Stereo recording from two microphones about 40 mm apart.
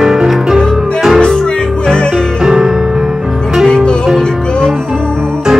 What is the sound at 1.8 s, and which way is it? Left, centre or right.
Music, centre.